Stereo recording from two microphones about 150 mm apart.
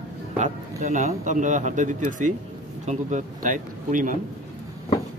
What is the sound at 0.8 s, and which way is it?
Speech, 55° right (ahead or behind).